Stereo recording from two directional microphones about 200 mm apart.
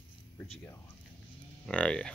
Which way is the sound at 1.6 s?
5° left (ahead or behind).